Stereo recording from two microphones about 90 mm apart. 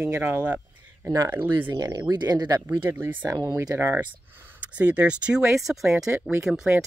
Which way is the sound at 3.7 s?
25° right (ahead or behind).